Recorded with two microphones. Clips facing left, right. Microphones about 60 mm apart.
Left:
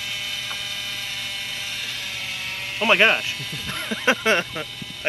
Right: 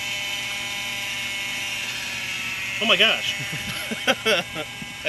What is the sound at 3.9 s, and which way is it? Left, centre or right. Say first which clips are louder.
Speech: left 2 dB; left.